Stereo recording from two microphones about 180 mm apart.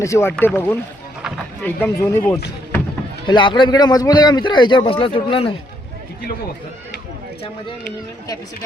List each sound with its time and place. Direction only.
0.0 s speech: 15° left (ahead or behind)
3.2 s a man's voice: 25° left (ahead or behind)